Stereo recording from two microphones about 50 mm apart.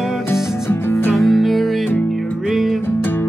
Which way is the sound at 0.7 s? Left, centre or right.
Left.